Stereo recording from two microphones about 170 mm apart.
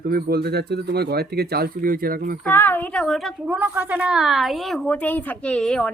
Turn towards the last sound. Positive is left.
turn(degrees=5)  # may be behind; listen again after turning